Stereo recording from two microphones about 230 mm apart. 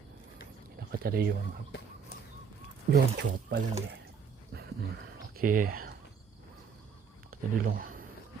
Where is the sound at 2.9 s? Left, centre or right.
Right.